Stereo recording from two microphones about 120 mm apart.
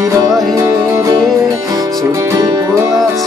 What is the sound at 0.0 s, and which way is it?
Music, 30° right (ahead or behind).